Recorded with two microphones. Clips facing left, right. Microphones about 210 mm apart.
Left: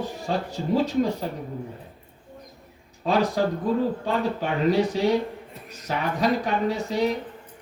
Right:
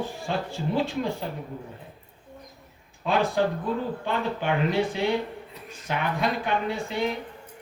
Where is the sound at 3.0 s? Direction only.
35° left (ahead or behind).